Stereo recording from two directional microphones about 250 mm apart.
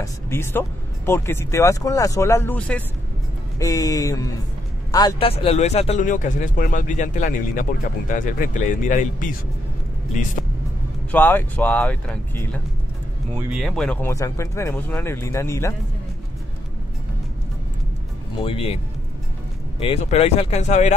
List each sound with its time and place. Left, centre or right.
0.0 s speech: centre; by 9.3 s left
11.1 s speech: centre
13.5 s speech: centre
18.4 s speech: left
19.8 s speech: left